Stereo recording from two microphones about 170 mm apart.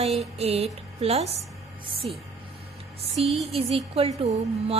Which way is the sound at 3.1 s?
35° right (ahead or behind).